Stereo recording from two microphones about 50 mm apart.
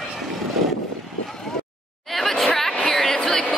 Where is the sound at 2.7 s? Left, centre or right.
Centre.